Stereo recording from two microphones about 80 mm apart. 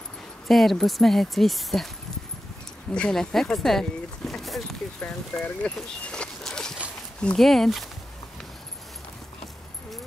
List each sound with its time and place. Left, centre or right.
0.5 s speech: centre
2.9 s speech: centre
5.3 s speech: centre
5.8 s dog: centre
7.3 s speech: centre